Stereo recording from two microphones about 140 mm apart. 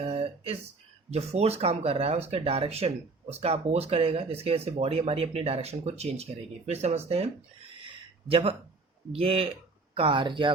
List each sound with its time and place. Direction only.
0.0 s a sound: 45° right (ahead or behind)
1.1 s speech: 50° right (ahead or behind)
8.3 s speech: 40° right (ahead or behind)